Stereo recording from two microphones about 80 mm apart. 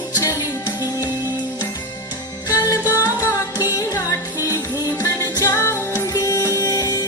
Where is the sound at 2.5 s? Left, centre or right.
Left.